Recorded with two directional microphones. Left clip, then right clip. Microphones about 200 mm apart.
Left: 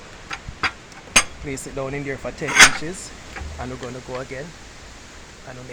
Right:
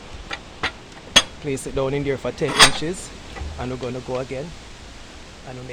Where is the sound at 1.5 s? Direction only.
45° right (ahead or behind).